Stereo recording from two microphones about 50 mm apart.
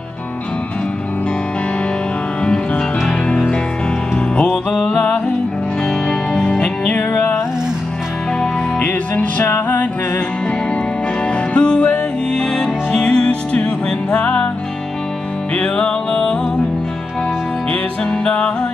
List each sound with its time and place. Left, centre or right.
6.0 s music: centre
8.7 s music: left
11.5 s music: left
15.5 s music: left
18.2 s music: centre